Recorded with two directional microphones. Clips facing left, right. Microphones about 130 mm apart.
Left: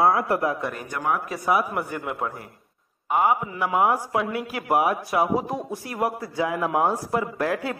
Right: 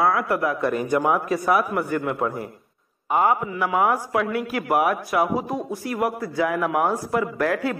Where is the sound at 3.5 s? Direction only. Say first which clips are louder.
Right 1 dB; 25° left (ahead or behind).